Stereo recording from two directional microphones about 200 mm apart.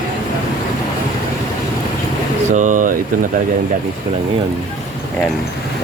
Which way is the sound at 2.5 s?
40° right (ahead or behind).